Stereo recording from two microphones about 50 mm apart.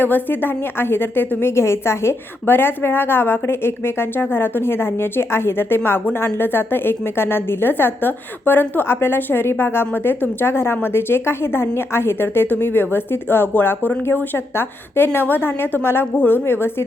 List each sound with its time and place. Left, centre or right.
0.0 s a woman's voice: left
14.3 s a woman's voice: left